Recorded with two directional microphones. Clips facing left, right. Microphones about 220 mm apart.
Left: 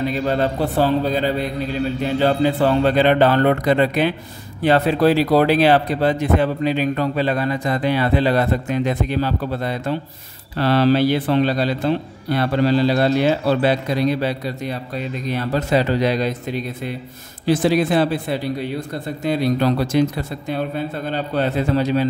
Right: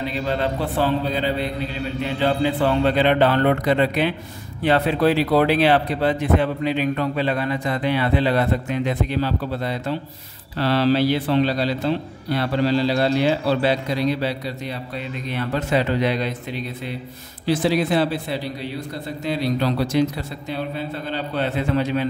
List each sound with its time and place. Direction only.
0.0 s a man's voice: 45° left (ahead or behind)